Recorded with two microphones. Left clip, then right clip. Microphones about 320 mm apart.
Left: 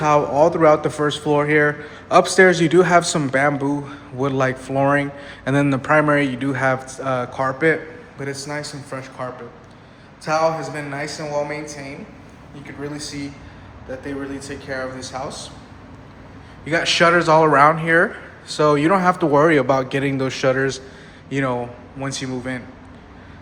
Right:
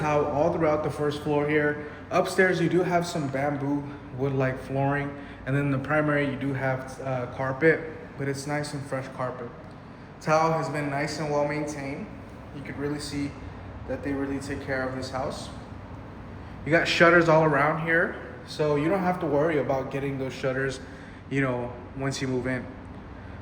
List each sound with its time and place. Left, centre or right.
0.0 s a man's voice: centre
16.6 s a man's voice: centre